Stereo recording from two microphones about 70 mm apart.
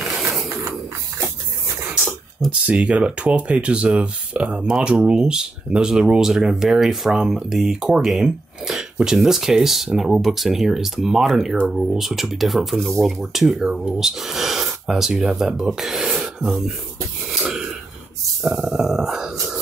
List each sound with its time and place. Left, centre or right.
2.6 s speech: centre
17.3 s wheeze: centre
18.4 s speech: centre